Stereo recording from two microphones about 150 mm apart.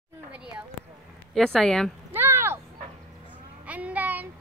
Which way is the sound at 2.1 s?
15° right (ahead or behind).